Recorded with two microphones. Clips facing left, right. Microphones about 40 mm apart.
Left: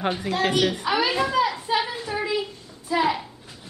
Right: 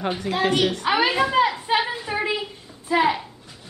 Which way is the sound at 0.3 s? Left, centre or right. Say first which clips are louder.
Right 2 dB; centre.